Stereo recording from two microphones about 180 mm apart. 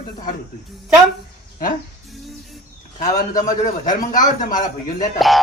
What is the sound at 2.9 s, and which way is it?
A man's voice, 45° left (ahead or behind).